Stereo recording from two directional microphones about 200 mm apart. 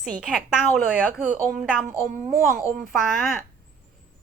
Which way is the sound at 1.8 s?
40° right (ahead or behind).